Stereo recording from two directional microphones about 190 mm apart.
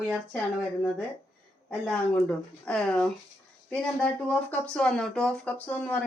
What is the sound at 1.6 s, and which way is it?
Speech, 5° left (ahead or behind).